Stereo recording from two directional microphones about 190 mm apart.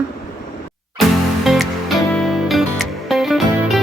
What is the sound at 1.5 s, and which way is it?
Music, centre (ahead or behind).